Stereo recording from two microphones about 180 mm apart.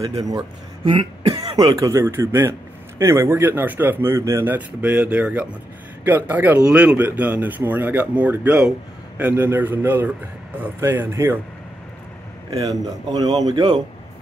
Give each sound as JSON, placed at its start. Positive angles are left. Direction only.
{"t": 0.2, "sound": "speech", "side_deg": -20}
{"t": 0.8, "sound": "speech", "side_deg": -30}
{"t": 12.4, "sound": "speech", "side_deg": -20}